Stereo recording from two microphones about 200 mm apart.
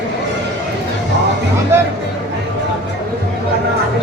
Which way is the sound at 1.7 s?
15° right (ahead or behind).